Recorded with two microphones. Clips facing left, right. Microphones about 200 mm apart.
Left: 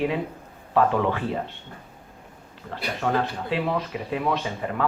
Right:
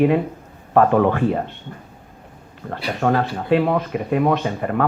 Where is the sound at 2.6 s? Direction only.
55° right (ahead or behind).